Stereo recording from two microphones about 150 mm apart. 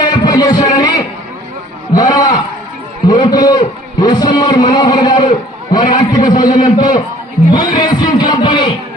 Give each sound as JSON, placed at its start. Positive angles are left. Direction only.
{"t": 0.0, "sound": "a sound", "side_deg": 30}
{"t": 3.1, "sound": "a man's voice", "side_deg": 30}
{"t": 7.5, "sound": "music", "side_deg": 30}